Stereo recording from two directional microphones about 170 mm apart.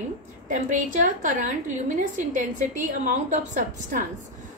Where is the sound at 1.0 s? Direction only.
50° right (ahead or behind).